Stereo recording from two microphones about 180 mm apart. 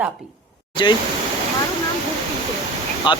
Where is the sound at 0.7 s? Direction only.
25° left (ahead or behind).